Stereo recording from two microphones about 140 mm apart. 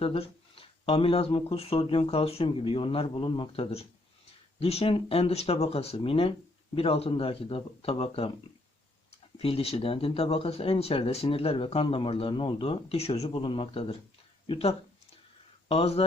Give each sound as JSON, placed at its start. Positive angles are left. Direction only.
{"t": 0.0, "sound": "speech", "side_deg": 40}